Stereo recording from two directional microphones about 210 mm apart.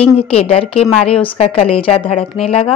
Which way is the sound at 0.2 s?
30° left (ahead or behind).